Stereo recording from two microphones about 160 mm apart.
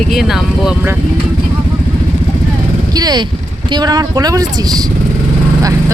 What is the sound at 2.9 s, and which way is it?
Speech, 25° right (ahead or behind).